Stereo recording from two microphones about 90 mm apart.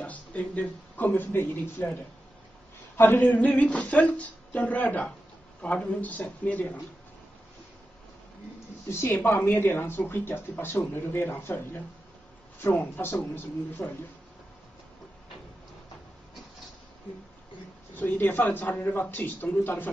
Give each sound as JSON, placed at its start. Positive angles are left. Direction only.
{"t": 0.0, "sound": "speech", "side_deg": 15}
{"t": 3.0, "sound": "a sound", "side_deg": 25}
{"t": 9.0, "sound": "speech", "side_deg": 20}
{"t": 17.9, "sound": "speech", "side_deg": 20}